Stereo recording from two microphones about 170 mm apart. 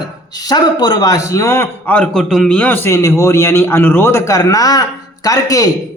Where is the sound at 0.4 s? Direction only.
25° left (ahead or behind).